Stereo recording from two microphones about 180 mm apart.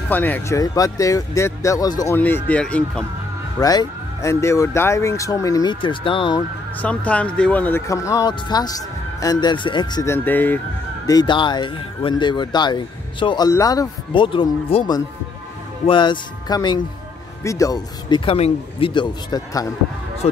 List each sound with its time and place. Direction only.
0.1 s speech: 10° left (ahead or behind)
3.5 s speech: 20° left (ahead or behind)
6.8 s speech: 5° left (ahead or behind); by 10.1 s 25° left (ahead or behind)
10.1 s speech: 10° left (ahead or behind)
11.1 s speech: 25° left (ahead or behind)